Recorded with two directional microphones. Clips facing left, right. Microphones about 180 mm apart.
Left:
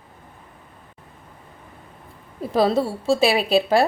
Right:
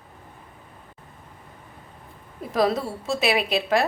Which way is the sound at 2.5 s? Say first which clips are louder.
Left 3 dB; 30° left (ahead or behind).